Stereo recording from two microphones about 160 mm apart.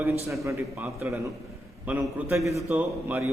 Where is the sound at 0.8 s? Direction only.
5° right (ahead or behind).